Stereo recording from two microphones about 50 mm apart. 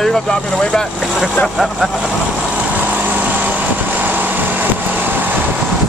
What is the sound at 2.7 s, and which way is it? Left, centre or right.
Vehicle, right.